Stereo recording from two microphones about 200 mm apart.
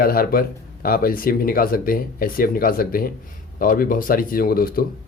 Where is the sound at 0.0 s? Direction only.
45° left (ahead or behind).